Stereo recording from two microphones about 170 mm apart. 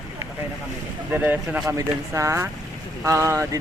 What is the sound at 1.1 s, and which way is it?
Speech, 10° right (ahead or behind).